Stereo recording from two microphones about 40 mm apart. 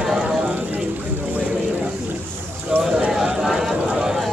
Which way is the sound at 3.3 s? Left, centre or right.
Centre.